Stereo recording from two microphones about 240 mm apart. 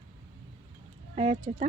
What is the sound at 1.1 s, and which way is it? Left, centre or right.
Speech, right.